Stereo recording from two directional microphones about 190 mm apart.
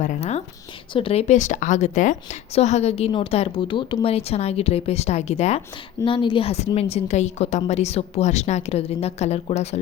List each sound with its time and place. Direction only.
0.0 s a woman's voice: 35° left (ahead or behind)